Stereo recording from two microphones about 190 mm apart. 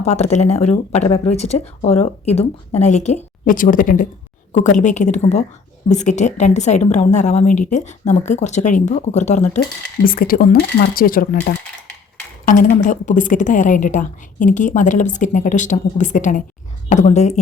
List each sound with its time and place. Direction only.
0.0 s a woman's voice: 35° left (ahead or behind)
10.1 s speech: 50° left (ahead or behind)
12.7 s a woman's voice: 40° left (ahead or behind)